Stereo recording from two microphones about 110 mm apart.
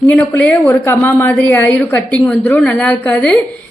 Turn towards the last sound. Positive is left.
turn(degrees=15)  # may be behind; listen again after turning